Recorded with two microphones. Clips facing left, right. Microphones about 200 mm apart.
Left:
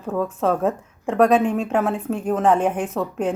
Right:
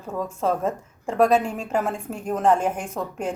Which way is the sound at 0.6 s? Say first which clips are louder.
Left 4 dB; 5° left (ahead or behind).